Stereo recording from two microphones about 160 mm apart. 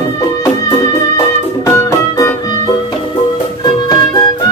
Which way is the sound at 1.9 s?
20° left (ahead or behind).